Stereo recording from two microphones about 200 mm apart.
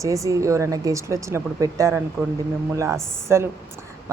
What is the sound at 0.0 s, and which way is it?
Speech, 15° right (ahead or behind).